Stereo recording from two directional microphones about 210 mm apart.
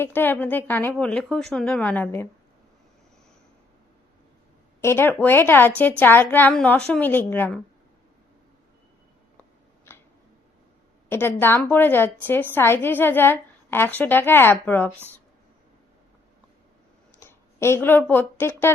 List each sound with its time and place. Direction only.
0.0 s a woman's voice: 10° left (ahead or behind)
4.8 s a woman's voice: 10° left (ahead or behind)
11.1 s a woman's voice: 10° left (ahead or behind)
17.2 s a woman's voice: 10° left (ahead or behind)